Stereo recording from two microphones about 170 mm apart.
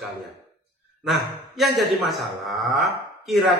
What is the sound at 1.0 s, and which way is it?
Speech, centre (ahead or behind).